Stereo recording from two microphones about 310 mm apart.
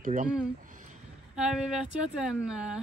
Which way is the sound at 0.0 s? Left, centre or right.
Right.